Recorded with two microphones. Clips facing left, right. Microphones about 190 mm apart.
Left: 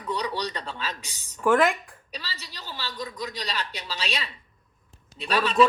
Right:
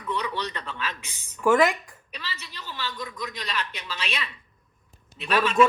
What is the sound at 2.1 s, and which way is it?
A woman's voice, 35° left (ahead or behind).